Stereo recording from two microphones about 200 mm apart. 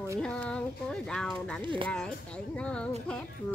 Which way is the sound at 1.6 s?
25° right (ahead or behind).